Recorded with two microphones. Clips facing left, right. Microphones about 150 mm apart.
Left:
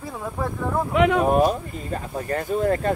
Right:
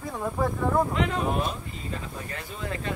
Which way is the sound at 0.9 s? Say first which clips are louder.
Left 9 dB; 65° left (ahead or behind).